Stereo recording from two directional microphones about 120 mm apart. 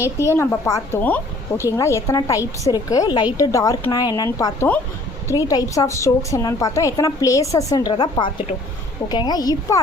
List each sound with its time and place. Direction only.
0.3 s a woman's voice: 20° left (ahead or behind)